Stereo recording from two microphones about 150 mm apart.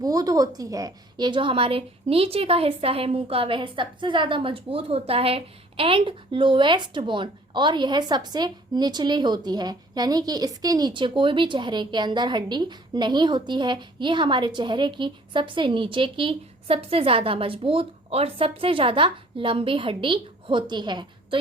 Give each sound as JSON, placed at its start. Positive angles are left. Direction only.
{"t": 0.0, "sound": "a woman's voice", "side_deg": -25}